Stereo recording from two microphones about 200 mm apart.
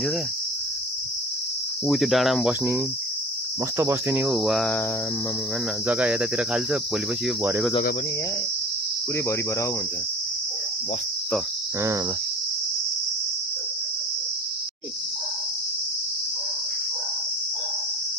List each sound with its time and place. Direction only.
1.9 s cricket: centre (ahead or behind)
5.9 s cricket: 5° right (ahead or behind)